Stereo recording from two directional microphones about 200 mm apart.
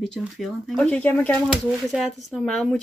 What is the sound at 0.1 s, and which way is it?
Speech, centre (ahead or behind).